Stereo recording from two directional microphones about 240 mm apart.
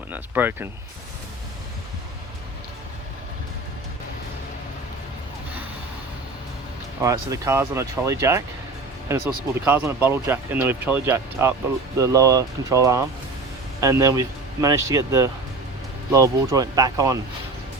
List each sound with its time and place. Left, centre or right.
0.1 s speech: centre
7.0 s speech: centre